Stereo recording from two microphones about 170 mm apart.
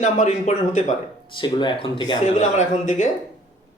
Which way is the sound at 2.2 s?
45° left (ahead or behind).